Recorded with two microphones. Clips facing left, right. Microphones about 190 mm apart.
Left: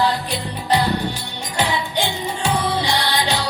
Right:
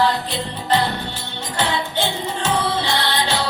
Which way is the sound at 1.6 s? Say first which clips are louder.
Even; 15° left (ahead or behind).